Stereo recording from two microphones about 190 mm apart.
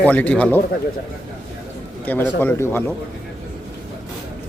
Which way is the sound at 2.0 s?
10° left (ahead or behind).